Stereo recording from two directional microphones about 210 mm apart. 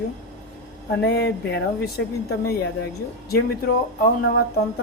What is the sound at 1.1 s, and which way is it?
A woman's voice, 50° left (ahead or behind).